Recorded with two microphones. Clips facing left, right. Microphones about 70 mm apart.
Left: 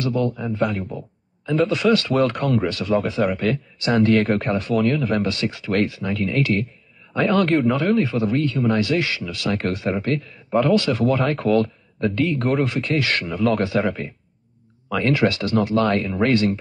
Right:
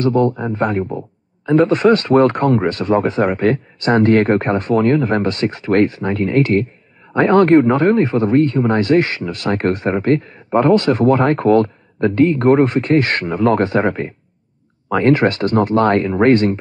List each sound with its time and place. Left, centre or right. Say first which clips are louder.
0.0 s speech: right 7 dB; right